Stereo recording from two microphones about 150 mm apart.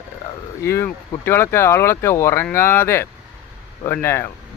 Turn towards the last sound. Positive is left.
turn(degrees=15)  # may be behind; listen again after turning